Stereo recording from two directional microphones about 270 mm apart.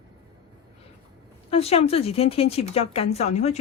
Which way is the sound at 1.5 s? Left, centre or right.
Left.